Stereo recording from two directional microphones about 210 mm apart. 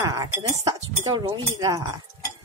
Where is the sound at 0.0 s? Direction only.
15° right (ahead or behind).